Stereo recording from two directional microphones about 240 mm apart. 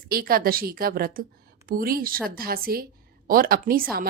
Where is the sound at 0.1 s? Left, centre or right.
Right.